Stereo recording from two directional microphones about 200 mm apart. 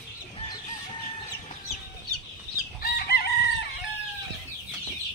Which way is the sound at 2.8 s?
50° left (ahead or behind).